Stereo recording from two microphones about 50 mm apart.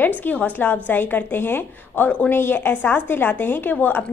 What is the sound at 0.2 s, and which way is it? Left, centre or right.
A woman's voice, left.